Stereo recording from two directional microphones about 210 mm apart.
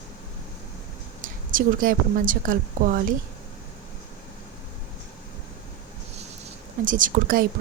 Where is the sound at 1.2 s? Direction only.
40° right (ahead or behind).